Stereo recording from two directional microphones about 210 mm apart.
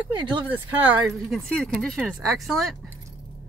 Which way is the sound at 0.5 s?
10° right (ahead or behind).